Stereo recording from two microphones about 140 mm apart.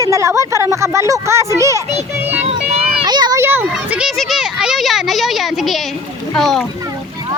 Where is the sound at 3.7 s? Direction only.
5° right (ahead or behind).